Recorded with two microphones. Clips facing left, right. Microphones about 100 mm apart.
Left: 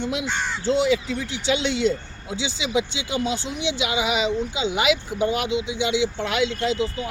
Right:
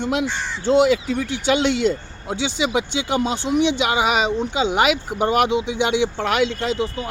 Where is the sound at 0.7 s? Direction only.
50° right (ahead or behind).